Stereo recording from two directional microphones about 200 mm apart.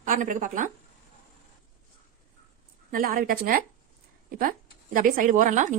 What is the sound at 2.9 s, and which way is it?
A woman's voice, 45° right (ahead or behind).